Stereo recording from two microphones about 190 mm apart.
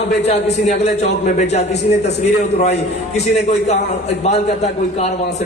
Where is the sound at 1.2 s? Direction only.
40° left (ahead or behind).